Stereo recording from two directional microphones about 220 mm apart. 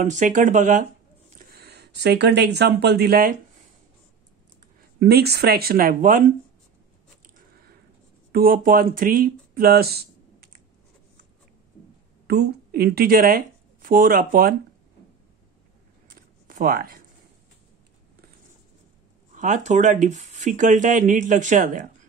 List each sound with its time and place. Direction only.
0.0 s speech: 35° right (ahead or behind)
1.5 s speech: 45° right (ahead or behind)
5.0 s speech: 45° right (ahead or behind)
8.3 s speech: 40° right (ahead or behind)
12.3 s speech: 45° right (ahead or behind)
16.1 s zipper: 40° right (ahead or behind)
19.3 s speech: 35° right (ahead or behind)